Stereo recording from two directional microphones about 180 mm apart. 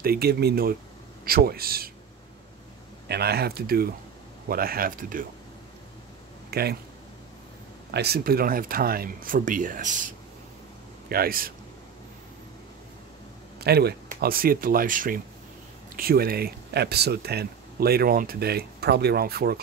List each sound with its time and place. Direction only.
0.0 s speech: 60° right (ahead or behind)
3.1 s speech: 60° right (ahead or behind)
6.5 s speech: 60° right (ahead or behind)
7.9 s speech: 65° right (ahead or behind)
13.6 s speech: 65° right (ahead or behind)